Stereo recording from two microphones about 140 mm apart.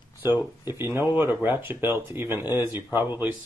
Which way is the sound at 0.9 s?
15° right (ahead or behind).